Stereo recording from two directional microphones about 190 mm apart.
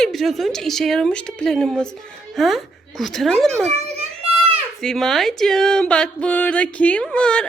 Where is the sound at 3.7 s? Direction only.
30° right (ahead or behind).